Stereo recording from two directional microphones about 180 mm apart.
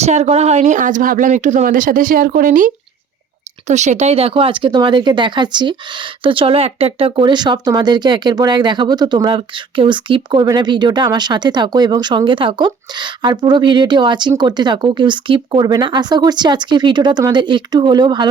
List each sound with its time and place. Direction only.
0.0 s speech: 35° right (ahead or behind)